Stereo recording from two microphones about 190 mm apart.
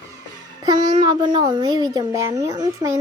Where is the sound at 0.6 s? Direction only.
20° right (ahead or behind).